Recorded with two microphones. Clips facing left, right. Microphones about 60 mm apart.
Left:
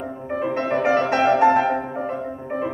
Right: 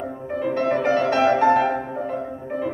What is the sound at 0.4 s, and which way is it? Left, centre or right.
Music, left.